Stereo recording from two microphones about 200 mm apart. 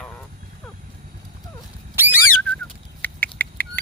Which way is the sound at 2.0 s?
10° right (ahead or behind).